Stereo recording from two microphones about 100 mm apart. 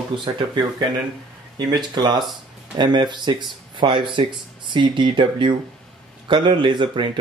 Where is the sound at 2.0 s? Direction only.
45° right (ahead or behind).